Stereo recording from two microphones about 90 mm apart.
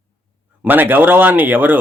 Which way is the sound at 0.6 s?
20° right (ahead or behind).